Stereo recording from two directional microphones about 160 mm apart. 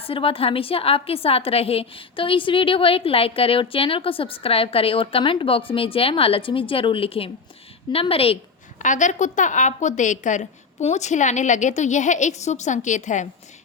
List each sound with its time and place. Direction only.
0.0 s a woman's voice: 35° left (ahead or behind)
8.8 s a woman's voice: 50° left (ahead or behind)